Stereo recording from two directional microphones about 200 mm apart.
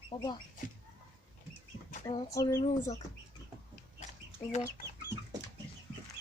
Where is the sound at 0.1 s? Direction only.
25° left (ahead or behind).